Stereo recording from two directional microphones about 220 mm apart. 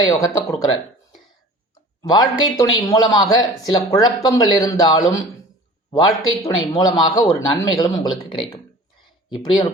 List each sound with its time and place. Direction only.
0.0 s speech: 15° left (ahead or behind)